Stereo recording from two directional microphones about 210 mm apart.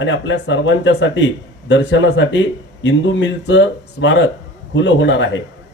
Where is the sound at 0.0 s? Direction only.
60° left (ahead or behind).